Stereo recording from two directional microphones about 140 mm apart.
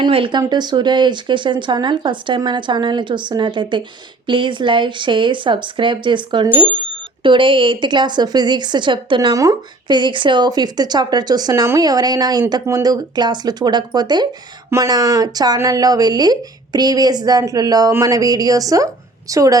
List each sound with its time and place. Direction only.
0.0 s speech: 40° right (ahead or behind)